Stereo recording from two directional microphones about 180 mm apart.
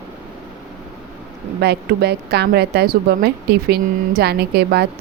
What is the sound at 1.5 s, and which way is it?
Speech, 65° right (ahead or behind).